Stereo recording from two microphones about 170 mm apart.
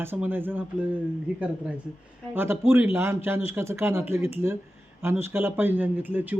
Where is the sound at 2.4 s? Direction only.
15° right (ahead or behind).